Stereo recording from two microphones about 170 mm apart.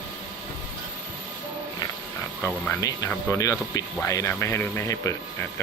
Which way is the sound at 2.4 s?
10° left (ahead or behind).